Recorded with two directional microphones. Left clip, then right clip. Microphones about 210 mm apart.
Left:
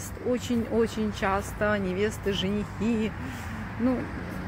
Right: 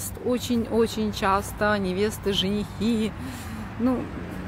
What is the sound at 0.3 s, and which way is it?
Speech, 15° right (ahead or behind).